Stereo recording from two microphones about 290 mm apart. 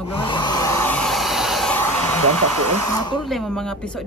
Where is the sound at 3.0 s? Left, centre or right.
Centre.